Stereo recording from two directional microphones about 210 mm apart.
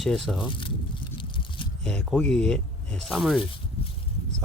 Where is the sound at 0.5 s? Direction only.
25° left (ahead or behind).